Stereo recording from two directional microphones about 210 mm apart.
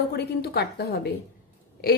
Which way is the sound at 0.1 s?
50° left (ahead or behind).